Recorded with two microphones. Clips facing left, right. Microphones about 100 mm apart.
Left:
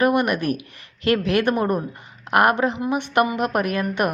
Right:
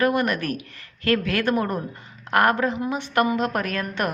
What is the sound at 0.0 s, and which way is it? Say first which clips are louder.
A woman's voice: left 3 dB; 20° left (ahead or behind).